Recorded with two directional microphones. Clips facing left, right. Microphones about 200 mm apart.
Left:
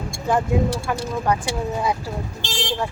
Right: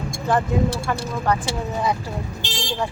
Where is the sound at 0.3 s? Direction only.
10° left (ahead or behind).